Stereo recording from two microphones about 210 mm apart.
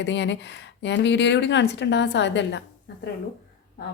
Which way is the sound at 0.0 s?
55° left (ahead or behind).